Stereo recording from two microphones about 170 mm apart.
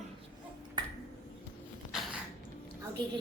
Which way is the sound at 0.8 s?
25° right (ahead or behind).